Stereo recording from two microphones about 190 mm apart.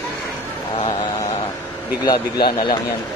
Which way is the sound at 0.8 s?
25° left (ahead or behind).